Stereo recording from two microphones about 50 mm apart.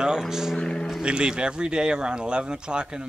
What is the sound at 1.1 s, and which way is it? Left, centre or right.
A man's voice, centre.